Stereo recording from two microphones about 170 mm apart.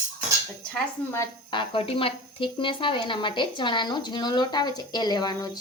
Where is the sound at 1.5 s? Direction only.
30° left (ahead or behind).